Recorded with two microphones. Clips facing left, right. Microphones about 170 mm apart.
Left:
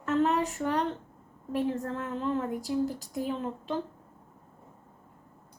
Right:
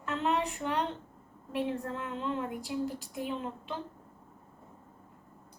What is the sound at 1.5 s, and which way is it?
A woman's voice, 40° left (ahead or behind).